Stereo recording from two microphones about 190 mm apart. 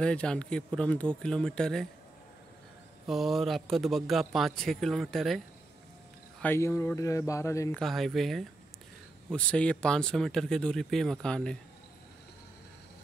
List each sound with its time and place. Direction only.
0.0 s speech: 5° left (ahead or behind)
3.1 s speech: centre (ahead or behind)
6.4 s speech: 15° left (ahead or behind)
7.8 s speech: centre (ahead or behind)